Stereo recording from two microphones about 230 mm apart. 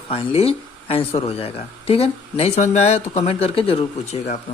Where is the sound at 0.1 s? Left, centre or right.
Left.